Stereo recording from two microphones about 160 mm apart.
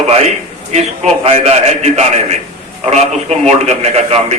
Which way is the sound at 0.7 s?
40° right (ahead or behind).